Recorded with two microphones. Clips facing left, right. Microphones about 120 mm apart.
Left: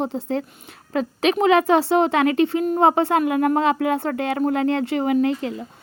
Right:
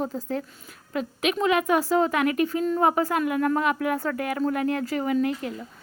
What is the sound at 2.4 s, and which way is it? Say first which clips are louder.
Speech: left 5 dB; 75° left (ahead or behind).